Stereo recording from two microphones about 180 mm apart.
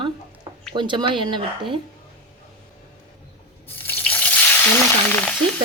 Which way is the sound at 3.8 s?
10° left (ahead or behind).